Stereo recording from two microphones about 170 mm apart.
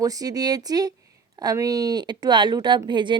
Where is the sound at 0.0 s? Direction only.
20° right (ahead or behind).